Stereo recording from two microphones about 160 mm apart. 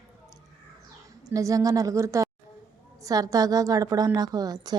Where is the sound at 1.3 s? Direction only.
20° right (ahead or behind).